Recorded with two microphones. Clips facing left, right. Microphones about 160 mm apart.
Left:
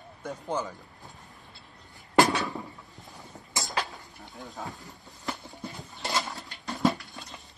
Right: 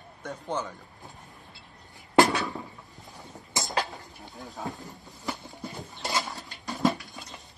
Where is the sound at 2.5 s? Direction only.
Centre (ahead or behind).